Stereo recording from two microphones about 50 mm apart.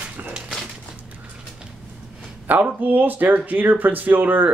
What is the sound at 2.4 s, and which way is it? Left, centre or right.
Speech, right.